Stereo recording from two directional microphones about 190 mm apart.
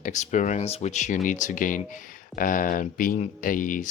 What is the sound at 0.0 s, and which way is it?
Speech, 40° left (ahead or behind).